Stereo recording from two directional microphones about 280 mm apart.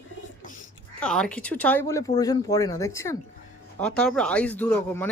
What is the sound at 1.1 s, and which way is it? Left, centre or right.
Speech, centre.